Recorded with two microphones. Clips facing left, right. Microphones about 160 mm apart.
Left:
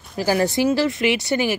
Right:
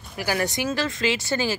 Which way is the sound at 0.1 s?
30° left (ahead or behind).